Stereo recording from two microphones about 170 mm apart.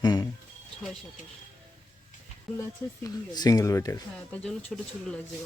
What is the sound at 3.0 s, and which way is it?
Speech, 20° left (ahead or behind).